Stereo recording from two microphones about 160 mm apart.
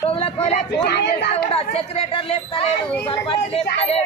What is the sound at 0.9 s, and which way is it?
Speech, 90° left.